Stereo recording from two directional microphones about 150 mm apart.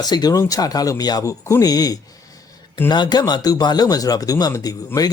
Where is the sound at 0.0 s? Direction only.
25° left (ahead or behind).